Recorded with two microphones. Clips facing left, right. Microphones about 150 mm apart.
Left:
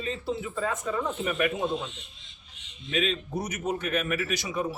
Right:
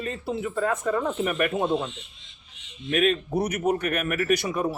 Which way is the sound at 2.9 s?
60° right (ahead or behind).